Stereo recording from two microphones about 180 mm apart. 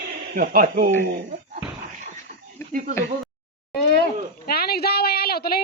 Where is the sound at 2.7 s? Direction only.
50° right (ahead or behind).